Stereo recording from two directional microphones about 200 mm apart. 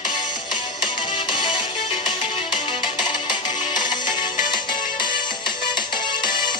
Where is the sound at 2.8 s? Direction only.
25° left (ahead or behind).